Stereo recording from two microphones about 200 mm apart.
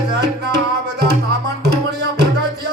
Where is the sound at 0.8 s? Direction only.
55° right (ahead or behind).